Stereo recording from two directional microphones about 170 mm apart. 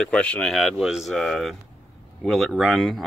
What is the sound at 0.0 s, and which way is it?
Speech, 5° left (ahead or behind).